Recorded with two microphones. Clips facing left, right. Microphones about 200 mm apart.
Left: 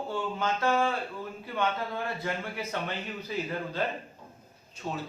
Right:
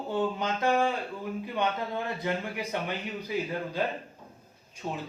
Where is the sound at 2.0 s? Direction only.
20° right (ahead or behind).